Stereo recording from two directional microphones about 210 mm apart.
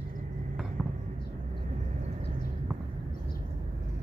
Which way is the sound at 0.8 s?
Centre (ahead or behind).